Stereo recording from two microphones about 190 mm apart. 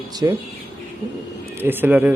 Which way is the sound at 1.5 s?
10° right (ahead or behind).